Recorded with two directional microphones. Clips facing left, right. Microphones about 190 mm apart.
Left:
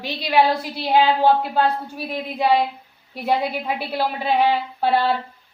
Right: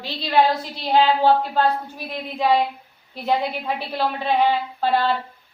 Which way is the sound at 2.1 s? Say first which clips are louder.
Left 1 dB; 10° left (ahead or behind).